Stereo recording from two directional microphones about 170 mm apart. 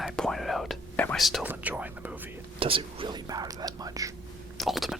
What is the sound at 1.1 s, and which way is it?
Speech, centre (ahead or behind).